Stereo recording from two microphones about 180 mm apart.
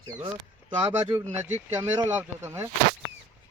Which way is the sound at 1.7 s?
15° right (ahead or behind).